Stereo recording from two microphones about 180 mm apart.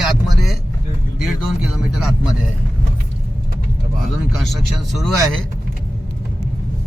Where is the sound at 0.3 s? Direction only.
Centre (ahead or behind).